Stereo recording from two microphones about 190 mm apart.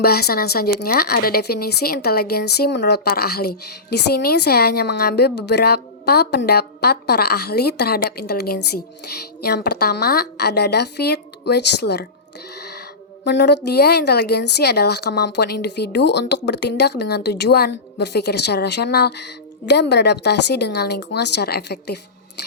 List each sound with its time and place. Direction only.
0.0 s speech: 55° left (ahead or behind)
12.5 s music: 60° left (ahead or behind)
13.2 s speech: 65° left (ahead or behind)